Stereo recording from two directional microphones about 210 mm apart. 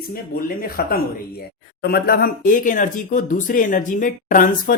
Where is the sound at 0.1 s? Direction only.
45° left (ahead or behind).